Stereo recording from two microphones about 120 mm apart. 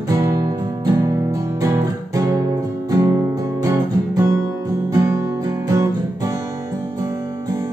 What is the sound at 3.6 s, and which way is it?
Music, 30° right (ahead or behind).